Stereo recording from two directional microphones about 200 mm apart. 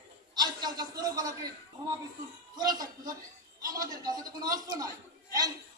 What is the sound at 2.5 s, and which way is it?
A man's voice, 20° right (ahead or behind).